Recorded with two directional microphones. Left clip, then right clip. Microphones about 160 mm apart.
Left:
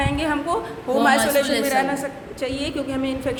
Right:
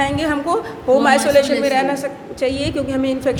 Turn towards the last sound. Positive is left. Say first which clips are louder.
# right 6 dB
turn(degrees=-30)  # may be behind; listen again after turning